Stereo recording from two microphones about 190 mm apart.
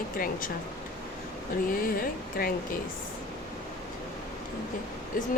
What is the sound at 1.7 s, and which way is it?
Speech, 50° left (ahead or behind).